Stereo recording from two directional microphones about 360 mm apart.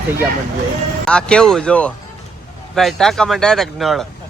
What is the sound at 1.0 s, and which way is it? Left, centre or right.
Speech, centre.